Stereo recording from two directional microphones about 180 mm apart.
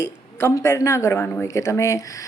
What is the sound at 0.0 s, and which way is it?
Speech, 15° left (ahead or behind).